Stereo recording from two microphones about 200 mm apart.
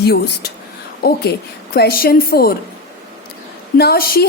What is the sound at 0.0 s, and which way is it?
Speech, 55° left (ahead or behind).